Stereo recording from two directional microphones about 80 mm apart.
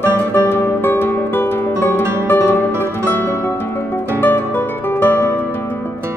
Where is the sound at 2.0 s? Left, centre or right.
Right.